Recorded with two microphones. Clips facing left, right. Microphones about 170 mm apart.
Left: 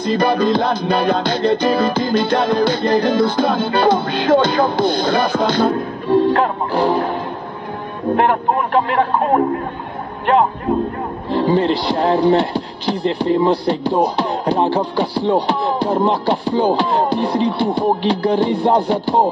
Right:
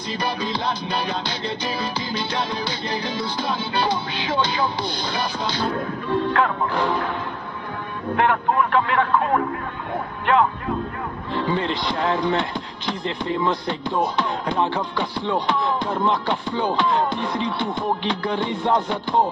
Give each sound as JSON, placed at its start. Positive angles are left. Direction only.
{"t": 0.0, "sound": "music", "side_deg": 50}
{"t": 5.7, "sound": "a man's voice", "side_deg": 35}
{"t": 8.2, "sound": "a man's voice", "side_deg": 40}